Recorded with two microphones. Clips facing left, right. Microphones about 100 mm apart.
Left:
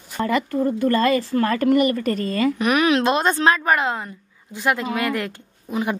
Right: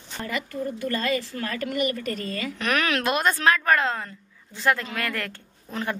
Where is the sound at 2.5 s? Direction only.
15° left (ahead or behind).